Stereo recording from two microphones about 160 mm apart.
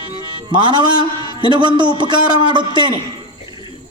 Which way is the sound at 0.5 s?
30° right (ahead or behind).